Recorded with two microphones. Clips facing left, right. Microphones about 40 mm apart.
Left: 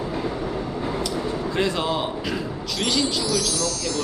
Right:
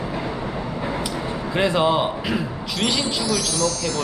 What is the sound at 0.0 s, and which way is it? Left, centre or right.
Speech, centre.